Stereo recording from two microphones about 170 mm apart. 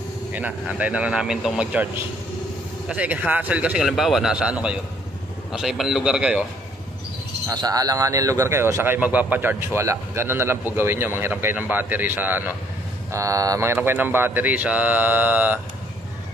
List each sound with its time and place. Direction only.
0.3 s a man's voice: 10° right (ahead or behind)
2.9 s a man's voice: 10° right (ahead or behind)
7.4 s a man's voice: 25° right (ahead or behind)